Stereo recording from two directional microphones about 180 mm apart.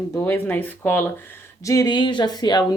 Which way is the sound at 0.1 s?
15° left (ahead or behind).